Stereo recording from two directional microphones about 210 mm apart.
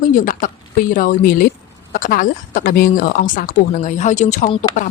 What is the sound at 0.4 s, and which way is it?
Speech, 40° left (ahead or behind).